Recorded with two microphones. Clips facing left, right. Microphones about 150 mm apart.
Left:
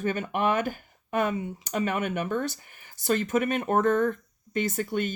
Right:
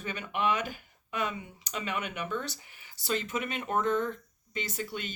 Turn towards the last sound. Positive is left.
turn(degrees=50)  # may be behind; listen again after turning